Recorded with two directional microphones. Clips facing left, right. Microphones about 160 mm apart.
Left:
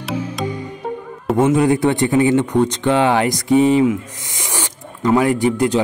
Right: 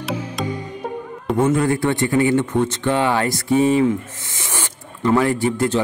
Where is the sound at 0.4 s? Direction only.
Centre (ahead or behind).